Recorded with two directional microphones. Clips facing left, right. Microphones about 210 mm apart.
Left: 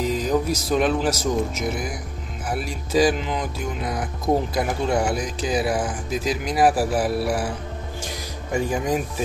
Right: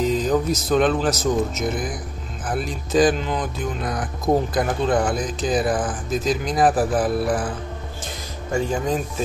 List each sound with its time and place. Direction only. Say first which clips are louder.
0.0 s speech: right 2 dB; 10° left (ahead or behind)